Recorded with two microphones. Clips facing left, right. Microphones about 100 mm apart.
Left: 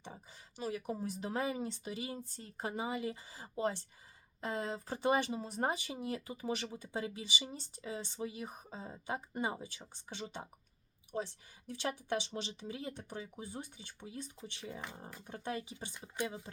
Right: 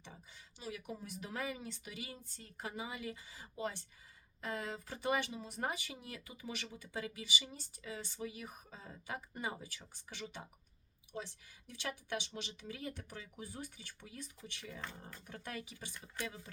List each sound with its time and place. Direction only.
0.6 s speech: 35° left (ahead or behind)
11.7 s speech: 35° left (ahead or behind)